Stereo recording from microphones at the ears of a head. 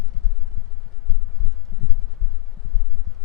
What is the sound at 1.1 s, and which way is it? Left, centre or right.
Heart sounds, left.